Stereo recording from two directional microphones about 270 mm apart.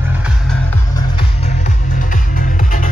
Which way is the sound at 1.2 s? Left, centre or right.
Left.